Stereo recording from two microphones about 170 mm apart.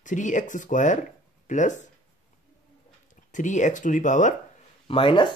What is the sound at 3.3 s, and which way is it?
Speech, 45° left (ahead or behind).